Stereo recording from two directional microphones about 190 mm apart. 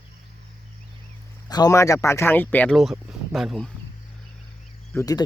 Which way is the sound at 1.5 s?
20° left (ahead or behind).